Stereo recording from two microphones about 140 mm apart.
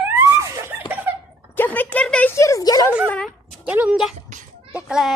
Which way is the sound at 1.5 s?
15° left (ahead or behind).